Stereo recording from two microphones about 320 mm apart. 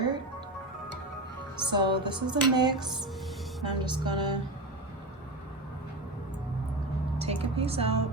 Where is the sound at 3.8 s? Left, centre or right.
Centre.